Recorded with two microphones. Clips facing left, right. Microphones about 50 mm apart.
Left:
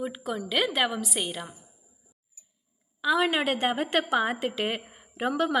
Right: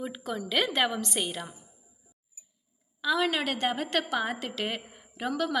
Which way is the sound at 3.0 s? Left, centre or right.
Centre.